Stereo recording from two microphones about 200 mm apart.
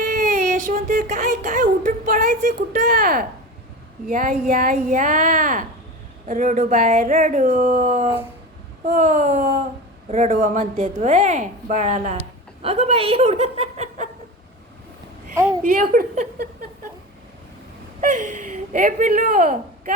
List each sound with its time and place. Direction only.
0.0 s a woman's voice: 40° right (ahead or behind)
8.0 s a sound: 10° right (ahead or behind)
8.9 s a woman's voice: 40° right (ahead or behind)
15.7 s speech: 45° right (ahead or behind)
18.0 s a woman's voice: 40° right (ahead or behind)